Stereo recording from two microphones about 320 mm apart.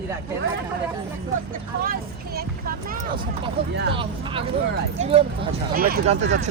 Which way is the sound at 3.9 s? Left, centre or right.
Centre.